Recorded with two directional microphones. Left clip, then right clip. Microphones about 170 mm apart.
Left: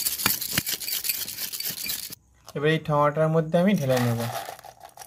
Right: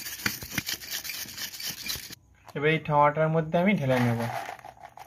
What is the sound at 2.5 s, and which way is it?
Speech, 25° left (ahead or behind).